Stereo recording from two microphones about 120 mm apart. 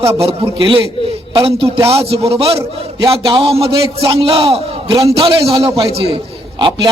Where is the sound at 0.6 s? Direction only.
40° right (ahead or behind).